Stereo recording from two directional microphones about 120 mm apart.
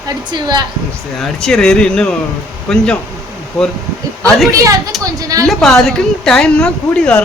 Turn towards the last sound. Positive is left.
turn(degrees=10)  # may be behind; listen again after turning